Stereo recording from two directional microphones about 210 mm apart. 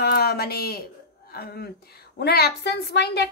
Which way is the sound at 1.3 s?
50° left (ahead or behind).